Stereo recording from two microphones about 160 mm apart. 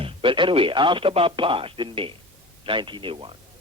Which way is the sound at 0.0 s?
30° right (ahead or behind).